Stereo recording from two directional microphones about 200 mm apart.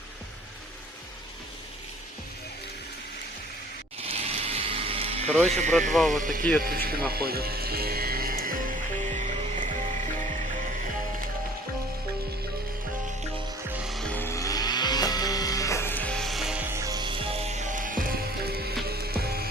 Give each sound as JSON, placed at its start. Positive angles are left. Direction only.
{"t": 4.0, "sound": "music", "side_deg": -30}
{"t": 5.5, "sound": "speech", "side_deg": -35}
{"t": 5.9, "sound": "speech", "side_deg": 0}
{"t": 6.6, "sound": "speech", "side_deg": -50}
{"t": 7.1, "sound": "music", "side_deg": -50}
{"t": 13.7, "sound": "music", "side_deg": 0}